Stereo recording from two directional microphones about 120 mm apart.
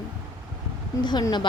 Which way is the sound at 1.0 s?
35° left (ahead or behind).